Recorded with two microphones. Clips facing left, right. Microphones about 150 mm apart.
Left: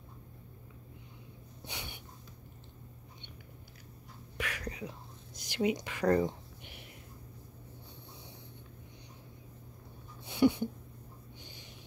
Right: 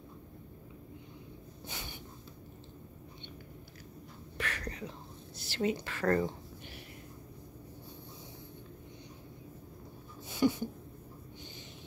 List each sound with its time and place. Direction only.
1.7 s snort: 20° left (ahead or behind)
4.4 s whispering: 10° left (ahead or behind)
10.2 s a sound: 20° left (ahead or behind)